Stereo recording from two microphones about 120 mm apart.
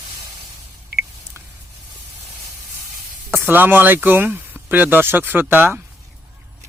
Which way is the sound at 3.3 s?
15° right (ahead or behind).